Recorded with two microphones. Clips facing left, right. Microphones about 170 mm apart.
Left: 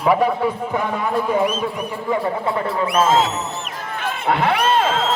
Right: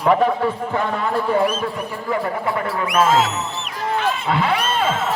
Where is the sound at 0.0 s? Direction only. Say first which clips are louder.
Even; 5° left (ahead or behind); by 3.4 s 30° left (ahead or behind).